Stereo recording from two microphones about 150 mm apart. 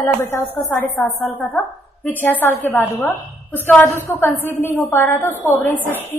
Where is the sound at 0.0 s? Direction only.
15° left (ahead or behind).